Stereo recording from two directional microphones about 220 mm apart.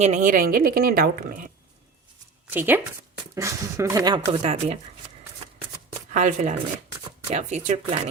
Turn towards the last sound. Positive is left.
turn(degrees=-35)  # may be behind; listen again after turning